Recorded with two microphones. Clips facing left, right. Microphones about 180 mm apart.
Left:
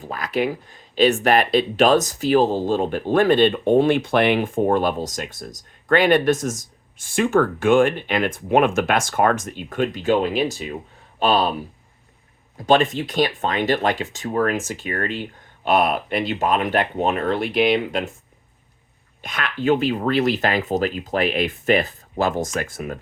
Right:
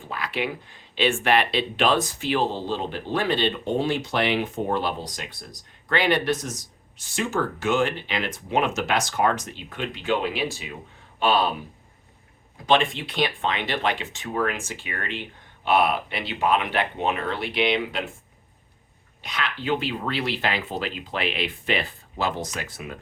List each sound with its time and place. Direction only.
0.0 s speech: 40° left (ahead or behind)
12.6 s speech: 45° left (ahead or behind)
19.2 s speech: 50° left (ahead or behind)